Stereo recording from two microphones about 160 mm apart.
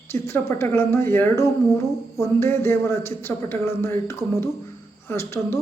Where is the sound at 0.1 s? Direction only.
15° left (ahead or behind).